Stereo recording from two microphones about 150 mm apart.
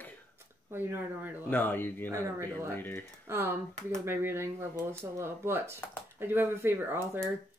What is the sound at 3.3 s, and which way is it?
Speech, 15° right (ahead or behind).